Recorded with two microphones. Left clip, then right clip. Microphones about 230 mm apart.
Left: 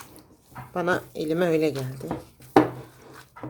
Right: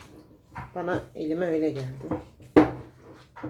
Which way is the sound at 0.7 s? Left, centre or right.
Left.